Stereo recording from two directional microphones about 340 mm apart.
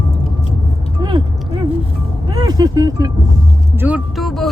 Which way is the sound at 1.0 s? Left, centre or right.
Centre.